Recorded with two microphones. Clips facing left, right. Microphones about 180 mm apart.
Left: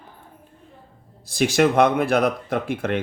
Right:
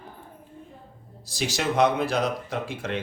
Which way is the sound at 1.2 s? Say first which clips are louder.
Left 9 dB; 55° left (ahead or behind).